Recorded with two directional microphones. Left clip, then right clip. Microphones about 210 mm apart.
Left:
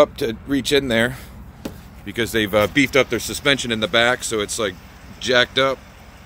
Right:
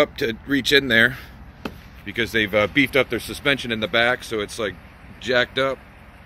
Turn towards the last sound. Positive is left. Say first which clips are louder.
# left 3 dB
turn(degrees=5)  # may be behind; listen again after turning